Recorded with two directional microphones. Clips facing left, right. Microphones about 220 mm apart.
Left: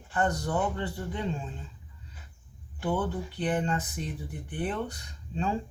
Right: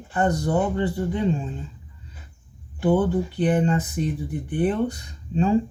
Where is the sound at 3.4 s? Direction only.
10° right (ahead or behind).